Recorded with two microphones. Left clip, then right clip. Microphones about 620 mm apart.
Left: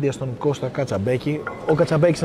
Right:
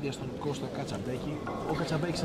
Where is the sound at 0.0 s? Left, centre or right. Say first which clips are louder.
Left 13 dB; left.